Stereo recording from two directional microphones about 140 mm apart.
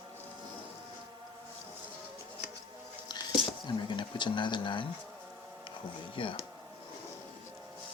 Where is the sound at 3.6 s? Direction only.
35° left (ahead or behind).